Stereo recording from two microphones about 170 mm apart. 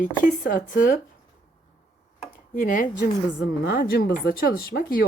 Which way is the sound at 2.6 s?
50° left (ahead or behind).